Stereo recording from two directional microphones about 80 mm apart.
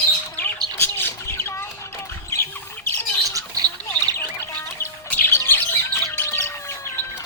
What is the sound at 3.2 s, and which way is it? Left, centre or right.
Rodents, right.